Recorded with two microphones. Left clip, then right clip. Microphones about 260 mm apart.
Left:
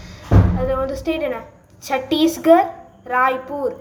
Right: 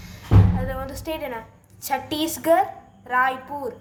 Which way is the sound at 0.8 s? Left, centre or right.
Right.